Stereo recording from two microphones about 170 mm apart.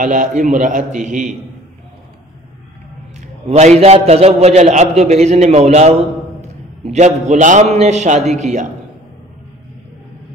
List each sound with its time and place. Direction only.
0.0 s a man's voice: 50° right (ahead or behind)
3.4 s a man's voice: 40° right (ahead or behind)